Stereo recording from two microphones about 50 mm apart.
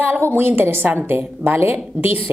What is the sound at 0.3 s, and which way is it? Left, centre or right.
A woman's voice, right.